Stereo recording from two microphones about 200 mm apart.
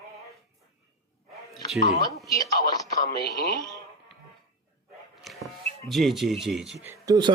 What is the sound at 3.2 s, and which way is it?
Speech, 50° left (ahead or behind).